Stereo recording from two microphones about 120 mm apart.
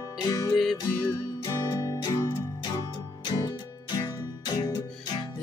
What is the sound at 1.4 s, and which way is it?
Music, 30° left (ahead or behind).